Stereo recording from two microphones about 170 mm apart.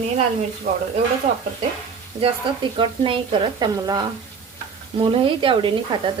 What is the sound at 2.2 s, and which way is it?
A woman's voice, 30° right (ahead or behind).